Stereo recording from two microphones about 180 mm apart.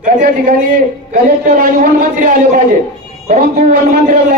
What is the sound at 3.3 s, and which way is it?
Speech, 45° right (ahead or behind).